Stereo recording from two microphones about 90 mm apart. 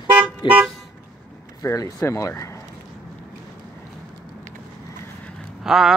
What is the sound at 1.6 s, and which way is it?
Speech, 35° left (ahead or behind).